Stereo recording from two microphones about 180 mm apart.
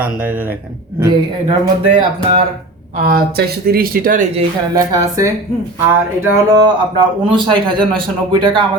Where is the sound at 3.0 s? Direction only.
60° right (ahead or behind).